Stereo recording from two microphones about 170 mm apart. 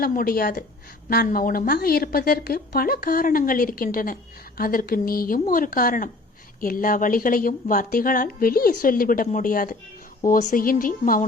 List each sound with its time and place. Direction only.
0.0 s a woman's voice: 60° left (ahead or behind)